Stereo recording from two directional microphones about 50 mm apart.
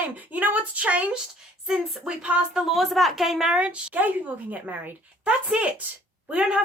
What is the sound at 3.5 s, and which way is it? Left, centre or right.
Speech, right.